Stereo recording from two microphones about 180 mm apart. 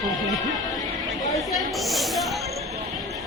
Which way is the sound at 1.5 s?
Centre (ahead or behind).